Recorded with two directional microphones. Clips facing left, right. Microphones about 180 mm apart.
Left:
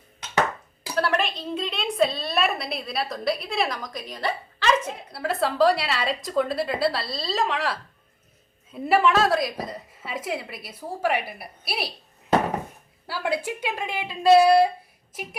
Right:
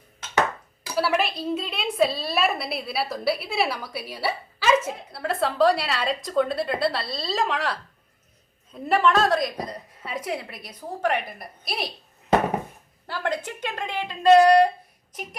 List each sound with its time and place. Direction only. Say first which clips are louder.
0.9 s a woman's voice: right 1 dB; 5° right (ahead or behind)
13.1 s a woman's voice: left 1 dB; 5° left (ahead or behind)